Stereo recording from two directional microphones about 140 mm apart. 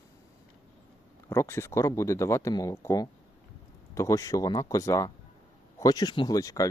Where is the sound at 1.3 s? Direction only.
20° left (ahead or behind).